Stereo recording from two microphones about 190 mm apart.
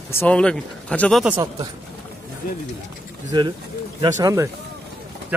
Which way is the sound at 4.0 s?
15° right (ahead or behind).